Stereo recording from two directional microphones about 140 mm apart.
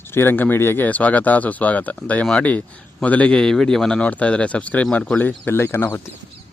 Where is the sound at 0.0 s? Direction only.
15° left (ahead or behind).